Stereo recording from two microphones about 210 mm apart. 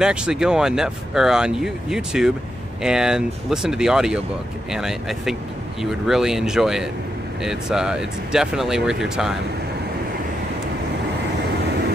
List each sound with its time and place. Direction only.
0.0 s speech: 5° right (ahead or behind)